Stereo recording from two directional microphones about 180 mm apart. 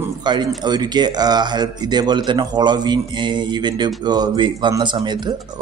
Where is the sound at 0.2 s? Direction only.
25° right (ahead or behind).